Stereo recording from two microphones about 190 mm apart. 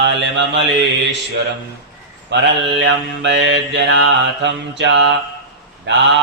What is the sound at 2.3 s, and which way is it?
Mantra, 65° right (ahead or behind).